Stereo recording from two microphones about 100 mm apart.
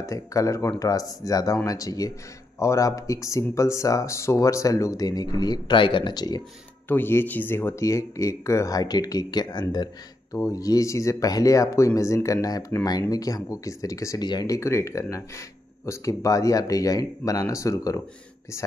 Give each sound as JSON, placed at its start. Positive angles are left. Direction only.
{"t": 0.0, "sound": "speech", "side_deg": 35}
{"t": 6.9, "sound": "speech", "side_deg": 20}